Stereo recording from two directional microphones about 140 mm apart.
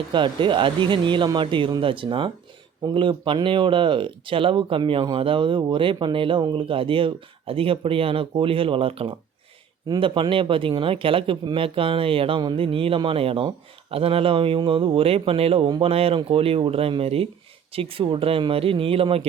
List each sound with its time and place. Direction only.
0.1 s speech: 35° right (ahead or behind)